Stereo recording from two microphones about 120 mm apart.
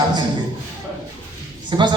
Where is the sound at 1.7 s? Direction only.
40° right (ahead or behind).